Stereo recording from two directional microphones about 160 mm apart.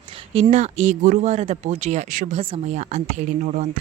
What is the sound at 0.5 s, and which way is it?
Speech, 45° right (ahead or behind).